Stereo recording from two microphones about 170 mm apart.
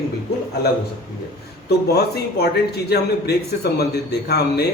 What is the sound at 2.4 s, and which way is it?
Speech, 70° left (ahead or behind).